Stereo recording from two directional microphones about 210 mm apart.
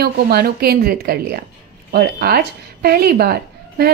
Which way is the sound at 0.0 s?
50° right (ahead or behind).